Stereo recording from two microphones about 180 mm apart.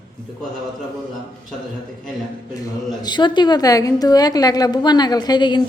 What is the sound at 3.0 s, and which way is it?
A woman's voice, 25° left (ahead or behind).